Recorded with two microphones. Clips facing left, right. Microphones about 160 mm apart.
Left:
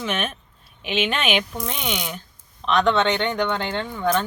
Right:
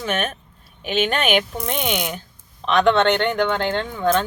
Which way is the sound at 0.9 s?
45° right (ahead or behind).